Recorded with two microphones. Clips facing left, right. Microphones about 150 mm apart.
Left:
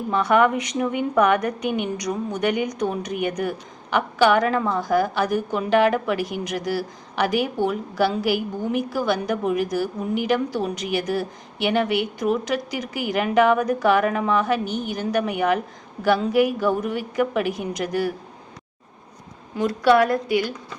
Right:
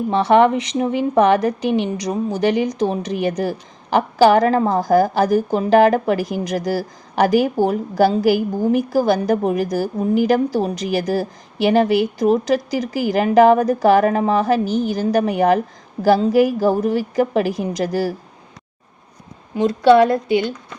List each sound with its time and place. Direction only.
0.1 s a woman's voice: 30° right (ahead or behind)
19.5 s a woman's voice: 25° right (ahead or behind)